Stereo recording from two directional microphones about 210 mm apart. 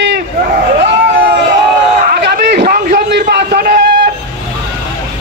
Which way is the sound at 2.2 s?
55° right (ahead or behind).